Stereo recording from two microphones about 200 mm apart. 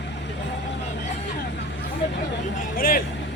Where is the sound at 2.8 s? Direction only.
45° left (ahead or behind).